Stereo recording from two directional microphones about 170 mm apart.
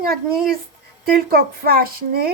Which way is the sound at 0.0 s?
60° right (ahead or behind).